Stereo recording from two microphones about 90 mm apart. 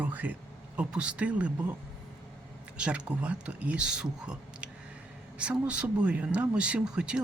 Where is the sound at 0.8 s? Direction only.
10° right (ahead or behind).